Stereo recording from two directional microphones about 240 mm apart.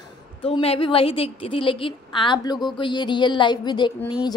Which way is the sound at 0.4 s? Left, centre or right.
Left.